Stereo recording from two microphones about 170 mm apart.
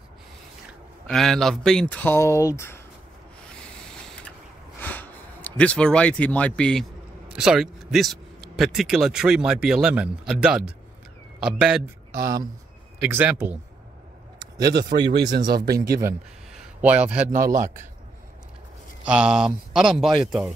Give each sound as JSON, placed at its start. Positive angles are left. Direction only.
{"t": 1.0, "sound": "speech", "side_deg": 0}
{"t": 3.4, "sound": "vehicle", "side_deg": 5}
{"t": 4.7, "sound": "a man's voice", "side_deg": 10}
{"t": 13.0, "sound": "speech", "side_deg": -10}
{"t": 14.7, "sound": "speech", "side_deg": -25}
{"t": 15.5, "sound": "a man's voice", "side_deg": -65}
{"t": 16.5, "sound": "a man's voice", "side_deg": -5}
{"t": 19.0, "sound": "speech", "side_deg": -5}